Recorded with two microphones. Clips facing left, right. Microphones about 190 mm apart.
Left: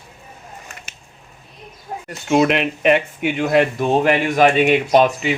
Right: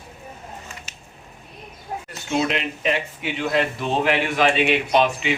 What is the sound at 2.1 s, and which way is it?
A man's voice, 55° left (ahead or behind).